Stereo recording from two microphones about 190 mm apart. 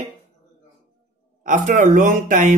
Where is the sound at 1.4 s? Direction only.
40° right (ahead or behind).